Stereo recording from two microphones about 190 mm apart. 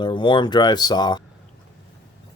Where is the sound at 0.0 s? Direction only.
25° left (ahead or behind).